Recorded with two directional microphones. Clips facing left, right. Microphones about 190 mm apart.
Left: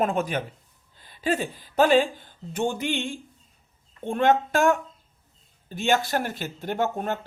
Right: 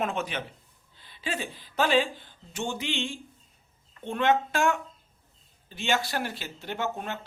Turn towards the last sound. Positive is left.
turn(degrees=45)  # may be behind; listen again after turning